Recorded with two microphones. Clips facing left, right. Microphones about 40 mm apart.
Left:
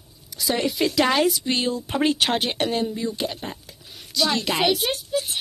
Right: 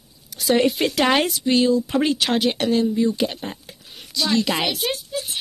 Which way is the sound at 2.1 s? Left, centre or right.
Left.